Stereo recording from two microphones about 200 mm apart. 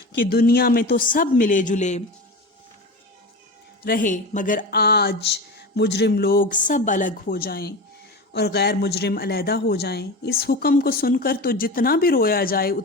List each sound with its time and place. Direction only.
0.3 s speech: 50° left (ahead or behind)
3.8 s speech: 40° left (ahead or behind)